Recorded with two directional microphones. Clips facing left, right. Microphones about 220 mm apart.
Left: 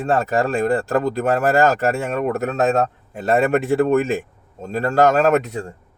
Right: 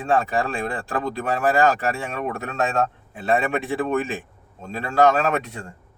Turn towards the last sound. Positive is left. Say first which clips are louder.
# left 6 dB
turn(degrees=40)  # may be behind; listen again after turning